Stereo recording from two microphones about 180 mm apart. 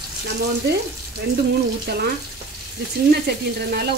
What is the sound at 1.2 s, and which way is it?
Speech, 65° right (ahead or behind).